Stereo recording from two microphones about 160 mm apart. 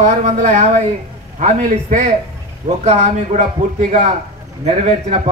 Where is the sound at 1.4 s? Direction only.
60° right (ahead or behind).